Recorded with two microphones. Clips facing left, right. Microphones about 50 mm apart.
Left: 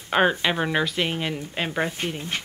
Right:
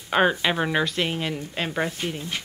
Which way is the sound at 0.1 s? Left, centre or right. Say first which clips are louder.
Even; centre.